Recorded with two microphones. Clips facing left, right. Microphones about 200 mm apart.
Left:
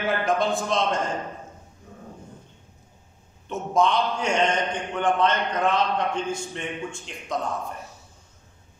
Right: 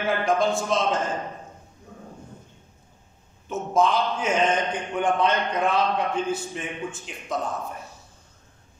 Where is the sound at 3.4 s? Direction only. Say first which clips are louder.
Even; 5° right (ahead or behind).